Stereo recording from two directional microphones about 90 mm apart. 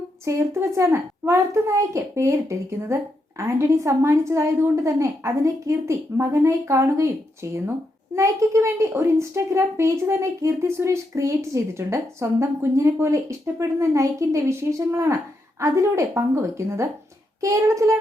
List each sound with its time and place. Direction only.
0.3 s a woman's voice: 35° right (ahead or behind)